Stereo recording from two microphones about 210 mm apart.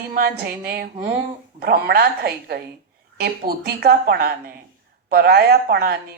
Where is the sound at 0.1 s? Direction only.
45° right (ahead or behind).